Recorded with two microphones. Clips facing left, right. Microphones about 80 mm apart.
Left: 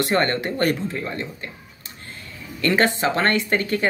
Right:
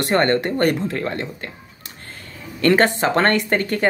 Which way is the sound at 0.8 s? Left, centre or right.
Right.